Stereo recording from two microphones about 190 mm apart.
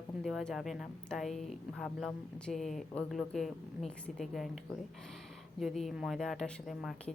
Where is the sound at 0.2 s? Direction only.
Centre (ahead or behind).